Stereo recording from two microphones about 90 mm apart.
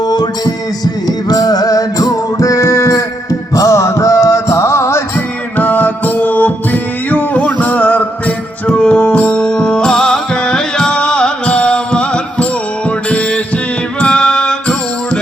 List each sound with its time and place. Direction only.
0.1 s music: 50° left (ahead or behind); by 5.0 s 30° left (ahead or behind)
5.5 s music: 20° left (ahead or behind)